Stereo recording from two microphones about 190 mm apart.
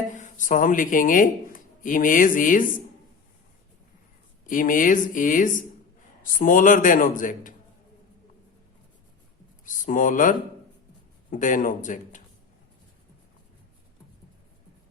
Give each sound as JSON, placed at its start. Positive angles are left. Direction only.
{"t": 0.2, "sound": "speech", "side_deg": 40}
{"t": 4.4, "sound": "speech", "side_deg": 45}
{"t": 9.6, "sound": "speech", "side_deg": 45}